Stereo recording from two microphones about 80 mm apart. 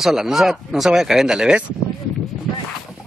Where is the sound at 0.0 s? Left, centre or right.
Centre.